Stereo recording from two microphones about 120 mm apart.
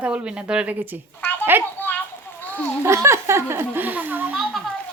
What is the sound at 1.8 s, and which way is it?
Children playing, 15° left (ahead or behind).